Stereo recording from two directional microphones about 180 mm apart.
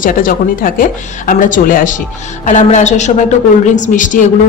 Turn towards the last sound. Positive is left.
turn(degrees=45)  # may be behind; listen again after turning